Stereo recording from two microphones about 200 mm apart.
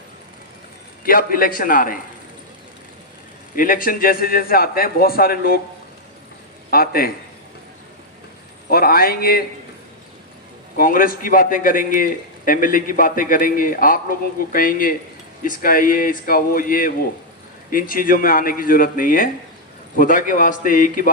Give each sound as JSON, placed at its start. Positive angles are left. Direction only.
{"t": 1.0, "sound": "a man's voice", "side_deg": 45}
{"t": 3.5, "sound": "a man's voice", "side_deg": 45}
{"t": 6.7, "sound": "a man's voice", "side_deg": 45}
{"t": 8.7, "sound": "a man's voice", "side_deg": 45}
{"t": 10.8, "sound": "a man's voice", "side_deg": 45}